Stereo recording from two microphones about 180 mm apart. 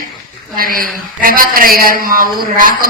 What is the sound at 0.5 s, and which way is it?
A woman's voice, 55° right (ahead or behind).